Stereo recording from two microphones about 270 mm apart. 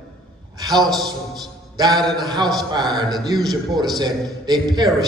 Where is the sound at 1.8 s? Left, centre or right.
Centre.